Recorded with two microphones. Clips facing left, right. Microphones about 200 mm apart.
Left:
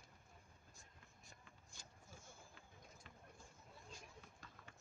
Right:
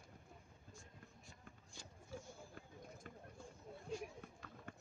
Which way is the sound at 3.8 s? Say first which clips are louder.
Right 15 dB; 60° right (ahead or behind).